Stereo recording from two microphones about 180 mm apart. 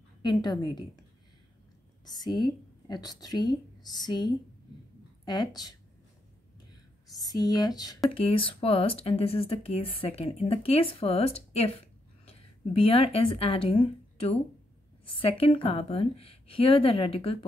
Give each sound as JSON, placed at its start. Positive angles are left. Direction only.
{"t": 0.2, "sound": "a woman's voice", "side_deg": 25}
{"t": 2.0, "sound": "a woman's voice", "side_deg": 20}
{"t": 7.2, "sound": "a woman's voice", "side_deg": 20}
{"t": 8.2, "sound": "speech", "side_deg": 30}